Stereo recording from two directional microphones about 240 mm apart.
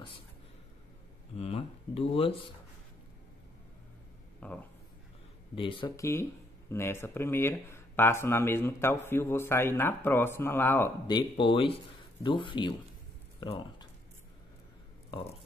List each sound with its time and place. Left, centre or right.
1.3 s speech: left
4.4 s speech: centre
5.6 s speech: left